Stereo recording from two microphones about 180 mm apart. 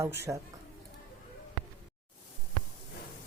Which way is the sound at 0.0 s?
15° right (ahead or behind).